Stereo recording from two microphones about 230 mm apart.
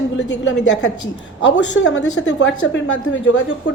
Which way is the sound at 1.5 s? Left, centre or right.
Left.